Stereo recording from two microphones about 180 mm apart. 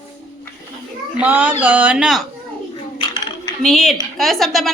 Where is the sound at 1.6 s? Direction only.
10° right (ahead or behind).